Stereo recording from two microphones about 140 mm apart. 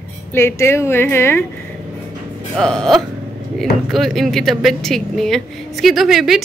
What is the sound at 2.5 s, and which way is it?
Speech, 5° left (ahead or behind).